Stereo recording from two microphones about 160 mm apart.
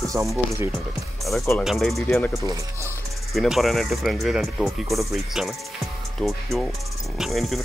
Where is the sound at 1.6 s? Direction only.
Centre (ahead or behind).